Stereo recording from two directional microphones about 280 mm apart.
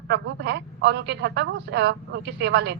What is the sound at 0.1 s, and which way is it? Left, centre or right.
A woman's voice, right.